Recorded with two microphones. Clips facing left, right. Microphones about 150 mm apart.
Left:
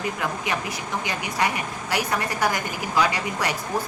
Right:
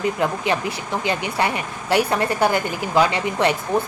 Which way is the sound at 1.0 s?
30° right (ahead or behind).